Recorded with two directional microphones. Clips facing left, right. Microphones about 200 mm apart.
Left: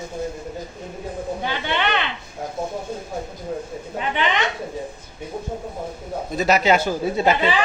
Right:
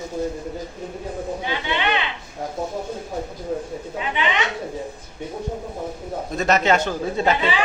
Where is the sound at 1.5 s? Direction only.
55° left (ahead or behind).